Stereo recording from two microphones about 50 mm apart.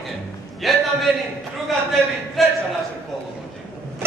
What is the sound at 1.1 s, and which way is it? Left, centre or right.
Speech, centre.